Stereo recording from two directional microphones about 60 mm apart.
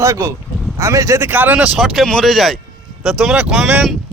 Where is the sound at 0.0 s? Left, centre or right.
Right.